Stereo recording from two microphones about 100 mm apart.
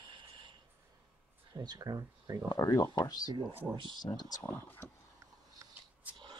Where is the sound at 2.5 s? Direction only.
40° left (ahead or behind).